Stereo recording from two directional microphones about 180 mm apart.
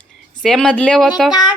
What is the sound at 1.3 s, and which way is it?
Speech, 25° left (ahead or behind).